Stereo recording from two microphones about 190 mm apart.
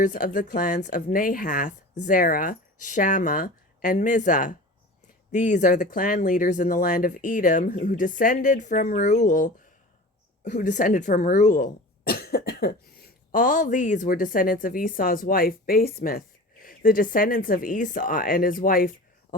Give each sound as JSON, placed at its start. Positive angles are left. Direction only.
{"t": 0.0, "sound": "speech", "side_deg": 40}